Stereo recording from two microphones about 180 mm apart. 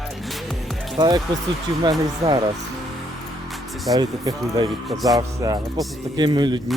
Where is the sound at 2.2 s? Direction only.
25° right (ahead or behind).